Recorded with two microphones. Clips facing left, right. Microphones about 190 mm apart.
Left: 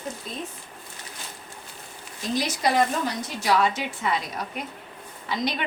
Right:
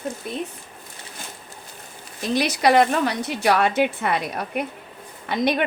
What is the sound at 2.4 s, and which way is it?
Speech, 70° right (ahead or behind).